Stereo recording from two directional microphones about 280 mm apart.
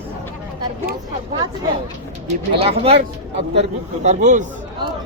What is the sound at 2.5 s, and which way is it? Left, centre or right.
Speech, centre.